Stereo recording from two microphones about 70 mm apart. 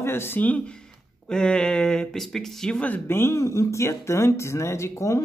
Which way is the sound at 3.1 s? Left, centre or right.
Left.